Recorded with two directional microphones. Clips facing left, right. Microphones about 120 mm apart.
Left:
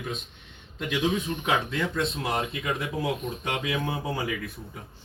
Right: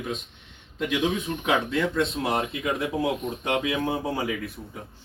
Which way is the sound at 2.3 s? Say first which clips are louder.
Right 2 dB; 20° right (ahead or behind).